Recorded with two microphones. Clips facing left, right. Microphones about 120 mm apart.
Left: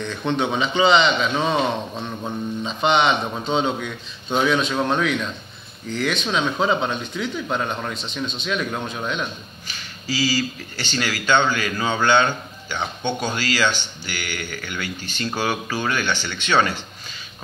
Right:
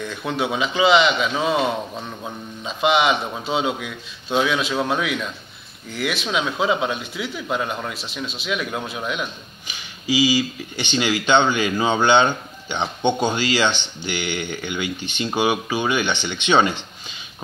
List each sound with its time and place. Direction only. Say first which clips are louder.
0.0 s speech: left 2 dB; 5° right (ahead or behind)